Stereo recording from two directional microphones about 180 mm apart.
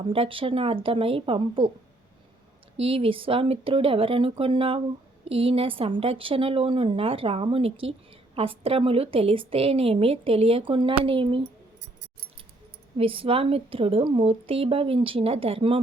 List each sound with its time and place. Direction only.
0.0 s a woman's voice: 30° right (ahead or behind)
2.7 s a woman's voice: 30° right (ahead or behind)
13.0 s a woman's voice: 30° right (ahead or behind)